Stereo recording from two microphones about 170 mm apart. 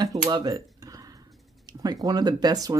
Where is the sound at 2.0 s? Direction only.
25° right (ahead or behind).